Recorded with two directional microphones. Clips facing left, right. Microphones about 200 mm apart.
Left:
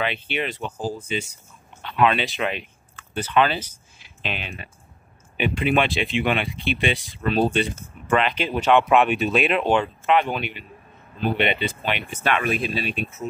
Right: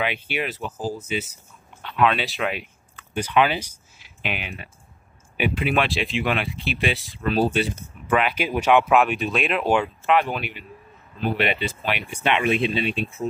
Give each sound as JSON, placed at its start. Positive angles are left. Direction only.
{"t": 0.0, "sound": "speech", "side_deg": -10}
{"t": 3.2, "sound": "speech", "side_deg": -10}
{"t": 12.1, "sound": "speech", "side_deg": -20}